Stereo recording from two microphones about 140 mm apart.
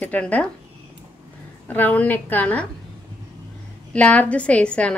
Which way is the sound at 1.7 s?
10° left (ahead or behind).